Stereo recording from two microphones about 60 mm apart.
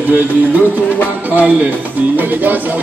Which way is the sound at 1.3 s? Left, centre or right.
Right.